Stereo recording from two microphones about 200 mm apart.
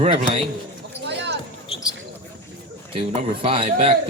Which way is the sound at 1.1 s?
60° right (ahead or behind).